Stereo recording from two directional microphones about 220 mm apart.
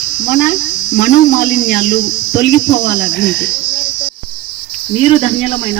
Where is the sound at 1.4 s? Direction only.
35° left (ahead or behind).